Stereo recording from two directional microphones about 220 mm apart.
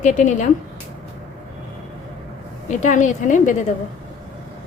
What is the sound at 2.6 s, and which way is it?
Speech, 35° left (ahead or behind).